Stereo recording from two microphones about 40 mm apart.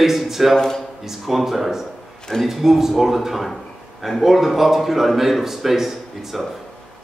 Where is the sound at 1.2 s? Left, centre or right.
Centre.